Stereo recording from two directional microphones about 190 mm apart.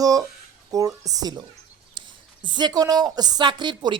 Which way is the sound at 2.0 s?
25° right (ahead or behind).